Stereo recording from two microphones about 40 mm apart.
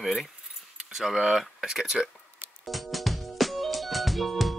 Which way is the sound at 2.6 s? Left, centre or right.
Centre.